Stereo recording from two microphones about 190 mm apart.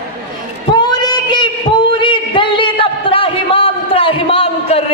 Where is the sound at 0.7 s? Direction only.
20° left (ahead or behind).